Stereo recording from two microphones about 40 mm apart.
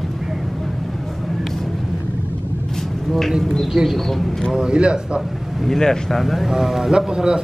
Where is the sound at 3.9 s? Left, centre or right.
Centre.